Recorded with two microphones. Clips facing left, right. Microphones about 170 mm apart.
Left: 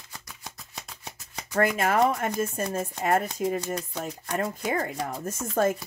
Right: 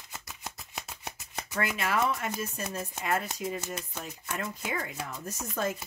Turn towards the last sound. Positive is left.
turn(degrees=50)  # may be behind; listen again after turning